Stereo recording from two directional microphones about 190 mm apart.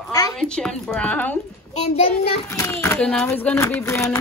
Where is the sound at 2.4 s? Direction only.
15° left (ahead or behind).